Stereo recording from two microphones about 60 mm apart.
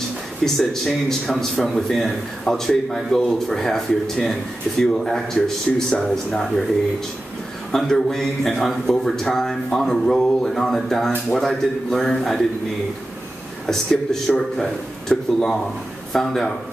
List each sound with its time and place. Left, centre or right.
0.5 s a man's voice: centre
7.7 s a man's voice: centre
13.7 s a man's voice: centre